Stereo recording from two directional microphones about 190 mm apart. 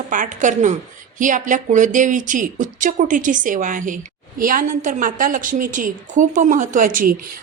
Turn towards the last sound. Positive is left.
turn(degrees=-45)  # may be behind; listen again after turning